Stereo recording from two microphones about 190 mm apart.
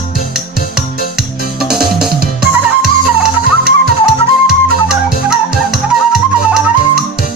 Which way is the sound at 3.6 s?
5° right (ahead or behind).